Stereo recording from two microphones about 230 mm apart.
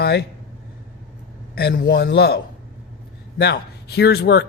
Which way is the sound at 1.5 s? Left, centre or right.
Left.